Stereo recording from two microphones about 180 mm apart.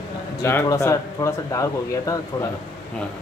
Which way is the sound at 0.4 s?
15° left (ahead or behind).